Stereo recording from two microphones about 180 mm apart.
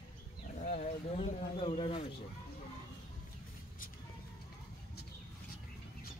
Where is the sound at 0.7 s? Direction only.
35° left (ahead or behind).